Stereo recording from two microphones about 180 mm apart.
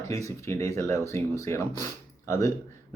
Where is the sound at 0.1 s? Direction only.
15° left (ahead or behind).